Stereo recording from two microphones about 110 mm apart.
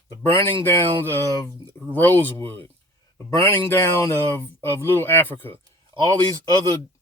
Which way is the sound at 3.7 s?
20° left (ahead or behind).